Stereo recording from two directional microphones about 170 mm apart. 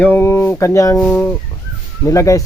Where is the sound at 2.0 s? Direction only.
20° left (ahead or behind).